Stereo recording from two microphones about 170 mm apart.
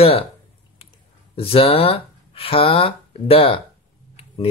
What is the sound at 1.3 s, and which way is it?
Speech, 35° left (ahead or behind).